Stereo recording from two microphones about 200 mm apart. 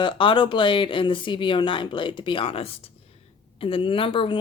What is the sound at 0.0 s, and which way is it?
Speech, 25° left (ahead or behind).